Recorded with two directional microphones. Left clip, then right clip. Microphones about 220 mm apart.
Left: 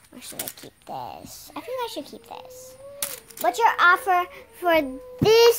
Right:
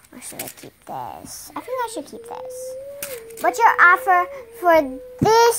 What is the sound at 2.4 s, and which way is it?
Speech, 10° left (ahead or behind).